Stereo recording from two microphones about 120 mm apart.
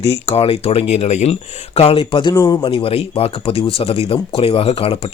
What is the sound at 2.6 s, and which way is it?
Speech, 50° left (ahead or behind).